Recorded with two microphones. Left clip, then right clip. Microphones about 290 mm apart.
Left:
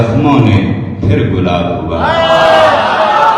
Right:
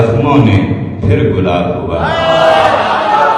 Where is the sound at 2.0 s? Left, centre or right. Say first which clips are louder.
Left 4 dB; left.